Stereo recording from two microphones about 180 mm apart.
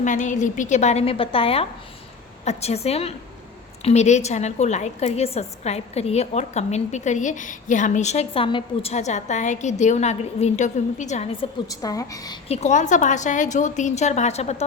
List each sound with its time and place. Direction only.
0.0 s a woman's voice: 45° left (ahead or behind)
11.7 s a woman's voice: 20° left (ahead or behind)
12.5 s a woman's voice: 40° left (ahead or behind)